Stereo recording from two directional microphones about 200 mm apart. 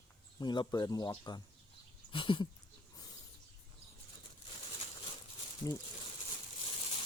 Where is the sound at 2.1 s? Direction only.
25° left (ahead or behind).